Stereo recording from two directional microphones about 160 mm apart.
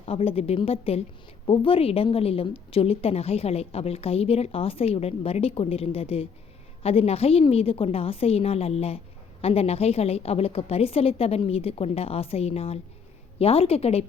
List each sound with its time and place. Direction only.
0.0 s a woman's voice: 40° left (ahead or behind)